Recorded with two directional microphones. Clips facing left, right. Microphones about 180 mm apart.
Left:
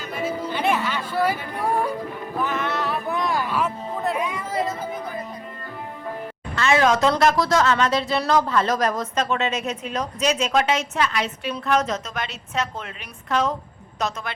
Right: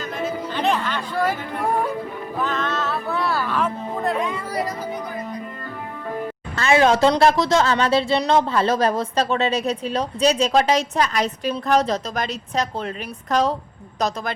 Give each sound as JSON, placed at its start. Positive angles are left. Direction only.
{"t": 0.0, "sound": "music", "side_deg": 10}
{"t": 2.4, "sound": "music", "side_deg": 10}
{"t": 4.4, "sound": "speech", "side_deg": 25}
{"t": 6.6, "sound": "speech", "side_deg": -30}